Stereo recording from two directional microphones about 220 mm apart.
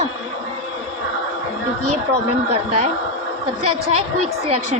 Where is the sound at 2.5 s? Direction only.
30° right (ahead or behind).